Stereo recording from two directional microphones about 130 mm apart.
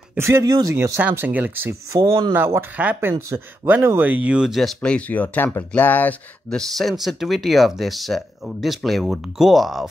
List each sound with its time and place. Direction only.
0.2 s speech: 25° right (ahead or behind); by 6.6 s 15° left (ahead or behind)
6.8 s speech: centre (ahead or behind)